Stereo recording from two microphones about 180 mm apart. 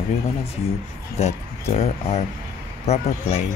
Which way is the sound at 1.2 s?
35° left (ahead or behind).